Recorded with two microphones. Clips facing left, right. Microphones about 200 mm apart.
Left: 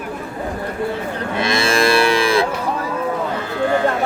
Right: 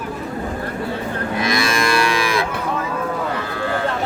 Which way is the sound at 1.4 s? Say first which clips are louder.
Left 4 dB; 30° left (ahead or behind).